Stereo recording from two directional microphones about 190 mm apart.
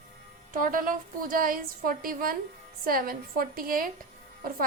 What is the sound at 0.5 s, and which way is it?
A woman's voice, 45° right (ahead or behind).